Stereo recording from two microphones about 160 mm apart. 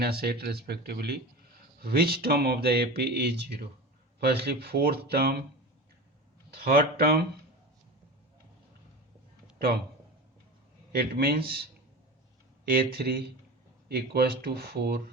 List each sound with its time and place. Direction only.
0.0 s speech: 80° right
6.5 s speech: 70° right (ahead or behind)
10.9 s speech: 75° right (ahead or behind)
12.6 s speech: 70° right (ahead or behind)
13.8 s speech: 85° right